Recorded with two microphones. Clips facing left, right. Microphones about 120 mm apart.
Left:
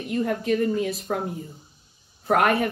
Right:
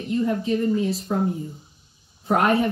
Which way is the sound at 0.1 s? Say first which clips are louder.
Right 1 dB; 60° left (ahead or behind).